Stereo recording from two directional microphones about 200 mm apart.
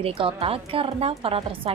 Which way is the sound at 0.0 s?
30° right (ahead or behind).